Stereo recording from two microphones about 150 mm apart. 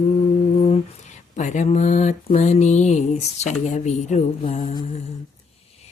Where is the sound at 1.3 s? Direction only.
55° left (ahead or behind).